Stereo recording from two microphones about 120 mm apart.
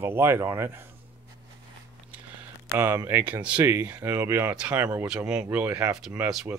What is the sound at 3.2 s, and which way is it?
Speech, 10° right (ahead or behind).